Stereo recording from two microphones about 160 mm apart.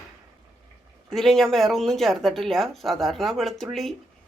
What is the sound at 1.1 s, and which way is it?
Speech, centre (ahead or behind).